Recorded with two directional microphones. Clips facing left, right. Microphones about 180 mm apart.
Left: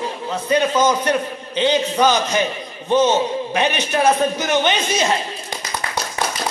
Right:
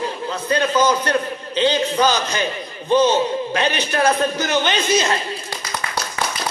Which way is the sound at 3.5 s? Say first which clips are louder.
Left 3 dB; 20° left (ahead or behind).